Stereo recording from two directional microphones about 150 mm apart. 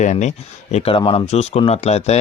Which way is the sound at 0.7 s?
35° left (ahead or behind).